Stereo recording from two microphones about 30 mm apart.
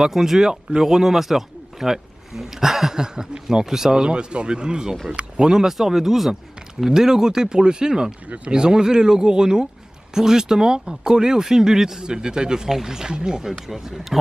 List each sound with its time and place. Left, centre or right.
0.0 s speech: centre
1.1 s speech: centre
3.0 s speech: centre
3.9 s speech: right
5.7 s speech: centre